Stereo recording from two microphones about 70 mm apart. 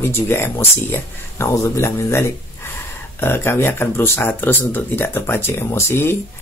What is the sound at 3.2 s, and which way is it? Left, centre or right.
Speech, left.